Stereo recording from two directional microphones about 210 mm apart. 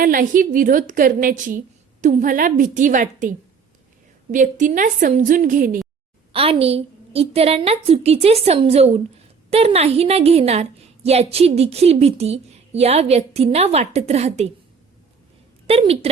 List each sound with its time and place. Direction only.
0.0 s a woman's voice: 40° right (ahead or behind)
6.3 s a woman's voice: 25° right (ahead or behind)
15.6 s a woman's voice: 30° right (ahead or behind)